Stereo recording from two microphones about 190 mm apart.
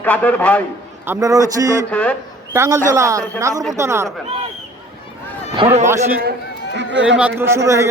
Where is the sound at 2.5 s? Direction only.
15° right (ahead or behind).